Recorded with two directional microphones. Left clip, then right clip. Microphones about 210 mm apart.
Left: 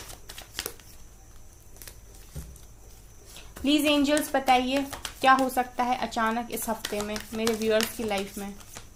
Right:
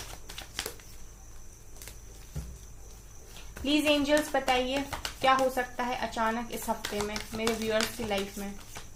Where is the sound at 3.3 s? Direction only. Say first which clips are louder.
Left 4 dB; 50° left (ahead or behind).